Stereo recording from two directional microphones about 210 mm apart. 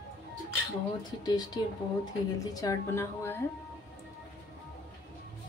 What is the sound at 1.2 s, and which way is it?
Speech, 20° left (ahead or behind).